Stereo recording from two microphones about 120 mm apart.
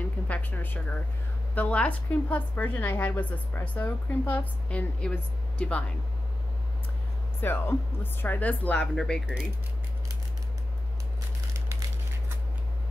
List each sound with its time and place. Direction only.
0.3 s a woman's voice: 15° left (ahead or behind)
7.3 s a woman's voice: 20° left (ahead or behind)